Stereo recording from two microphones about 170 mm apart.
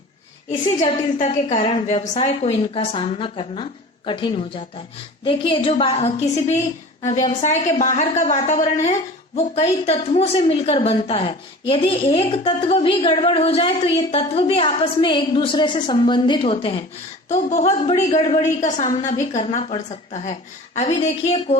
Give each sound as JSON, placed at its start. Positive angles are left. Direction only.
{"t": 0.4, "sound": "a woman's voice", "side_deg": 40}
{"t": 17.2, "sound": "a woman's voice", "side_deg": 40}